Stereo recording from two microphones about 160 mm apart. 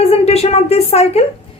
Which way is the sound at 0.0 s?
40° left (ahead or behind).